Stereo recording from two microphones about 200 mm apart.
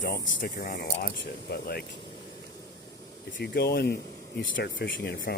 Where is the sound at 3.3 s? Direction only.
55° left (ahead or behind).